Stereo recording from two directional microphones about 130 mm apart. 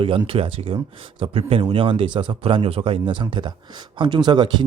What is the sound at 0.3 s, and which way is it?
Speech, 45° right (ahead or behind).